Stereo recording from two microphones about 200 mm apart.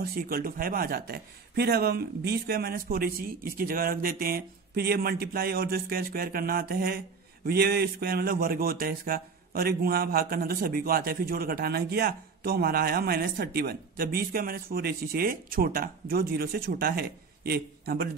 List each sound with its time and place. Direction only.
0.0 s speech: 45° right (ahead or behind)